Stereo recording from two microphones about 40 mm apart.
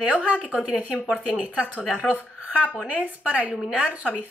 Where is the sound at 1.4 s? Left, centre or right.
Right.